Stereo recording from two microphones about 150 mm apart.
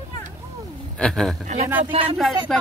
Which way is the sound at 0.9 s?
5° left (ahead or behind).